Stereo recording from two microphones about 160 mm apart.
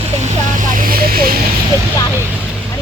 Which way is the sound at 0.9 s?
70° right (ahead or behind).